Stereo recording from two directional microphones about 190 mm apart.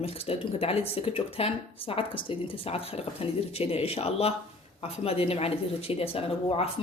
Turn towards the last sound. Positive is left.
turn(degrees=30)  # may be behind; listen again after turning